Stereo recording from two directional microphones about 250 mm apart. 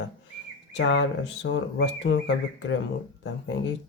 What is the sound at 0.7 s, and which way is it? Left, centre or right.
Speech, left.